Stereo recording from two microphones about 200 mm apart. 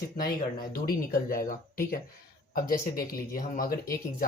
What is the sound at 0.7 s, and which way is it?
Speech, 45° left (ahead or behind).